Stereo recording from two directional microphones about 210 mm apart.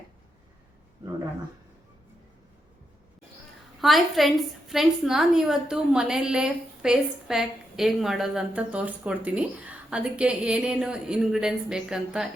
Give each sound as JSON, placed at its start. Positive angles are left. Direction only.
{"t": 3.8, "sound": "a woman's voice", "side_deg": 0}